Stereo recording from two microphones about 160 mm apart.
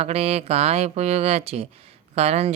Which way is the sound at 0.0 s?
40° right (ahead or behind).